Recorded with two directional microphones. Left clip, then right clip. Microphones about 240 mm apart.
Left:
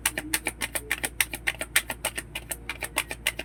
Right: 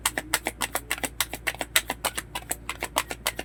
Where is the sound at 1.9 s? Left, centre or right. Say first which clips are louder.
Right 2 dB; centre.